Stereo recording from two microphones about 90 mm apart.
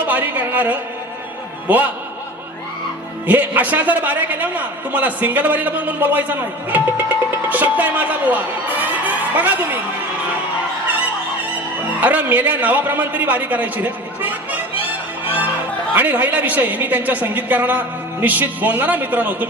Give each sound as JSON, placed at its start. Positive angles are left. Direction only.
{"t": 0.1, "sound": "a man's voice", "side_deg": -20}
{"t": 3.2, "sound": "a man's voice", "side_deg": -20}
{"t": 11.9, "sound": "a man's voice", "side_deg": -20}
{"t": 16.0, "sound": "a man's voice", "side_deg": -20}